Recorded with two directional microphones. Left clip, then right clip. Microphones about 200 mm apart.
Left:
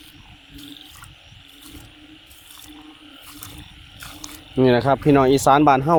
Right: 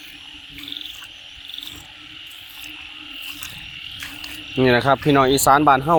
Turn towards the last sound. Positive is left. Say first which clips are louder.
# even
turn(degrees=20)  # may be behind; listen again after turning